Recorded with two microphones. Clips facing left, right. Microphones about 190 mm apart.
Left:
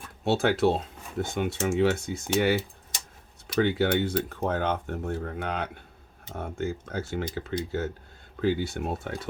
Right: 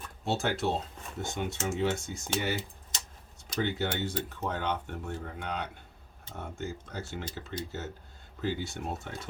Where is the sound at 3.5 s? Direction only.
60° left (ahead or behind).